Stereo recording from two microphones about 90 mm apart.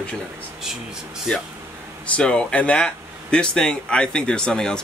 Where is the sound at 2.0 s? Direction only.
15° left (ahead or behind).